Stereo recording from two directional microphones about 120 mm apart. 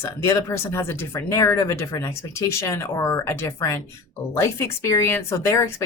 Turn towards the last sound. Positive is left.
turn(degrees=20)  # may be behind; listen again after turning